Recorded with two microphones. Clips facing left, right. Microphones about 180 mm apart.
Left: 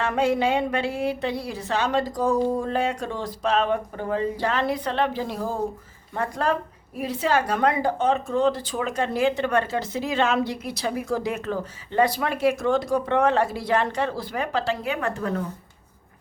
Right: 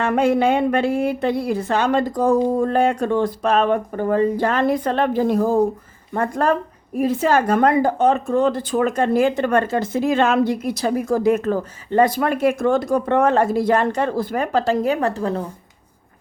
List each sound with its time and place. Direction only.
0.0 s a woman's voice: 55° right (ahead or behind); by 15.4 s 30° right (ahead or behind)